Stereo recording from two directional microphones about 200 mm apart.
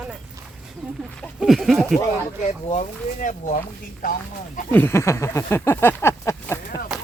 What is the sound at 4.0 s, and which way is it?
Speech, 45° left (ahead or behind).